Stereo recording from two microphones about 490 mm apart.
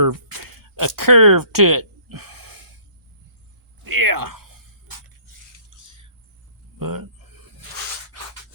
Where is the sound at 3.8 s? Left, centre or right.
Right.